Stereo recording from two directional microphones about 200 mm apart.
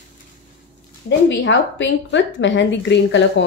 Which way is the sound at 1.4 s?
65° left (ahead or behind).